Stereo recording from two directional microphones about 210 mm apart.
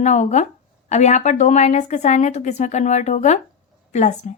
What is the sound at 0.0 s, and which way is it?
A woman's voice, 35° left (ahead or behind).